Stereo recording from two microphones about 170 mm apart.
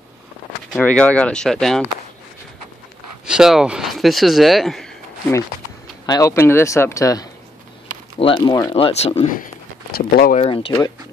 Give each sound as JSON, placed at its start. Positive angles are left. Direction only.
{"t": 0.7, "sound": "speech", "side_deg": 5}
{"t": 3.3, "sound": "speech", "side_deg": -5}
{"t": 6.0, "sound": "speech", "side_deg": 20}
{"t": 8.2, "sound": "speech", "side_deg": 30}
{"t": 9.9, "sound": "speech", "side_deg": 60}
{"t": 10.3, "sound": "speech", "side_deg": 35}